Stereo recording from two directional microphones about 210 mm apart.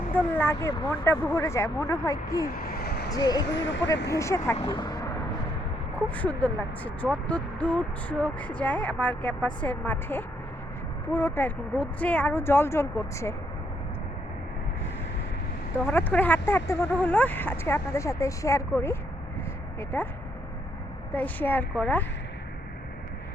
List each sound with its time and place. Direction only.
0.3 s speech: 10° left (ahead or behind)
2.5 s vehicle: 45° left (ahead or behind)
3.1 s speech: 20° left (ahead or behind)
3.4 s speech: 60° left (ahead or behind)
4.1 s speech: 15° left (ahead or behind)
4.6 s a sound: 20° left (ahead or behind)
6.1 s speech: 5° left (ahead or behind)
15.9 s speech: 10° left (ahead or behind)
21.1 s speech: 5° left (ahead or behind)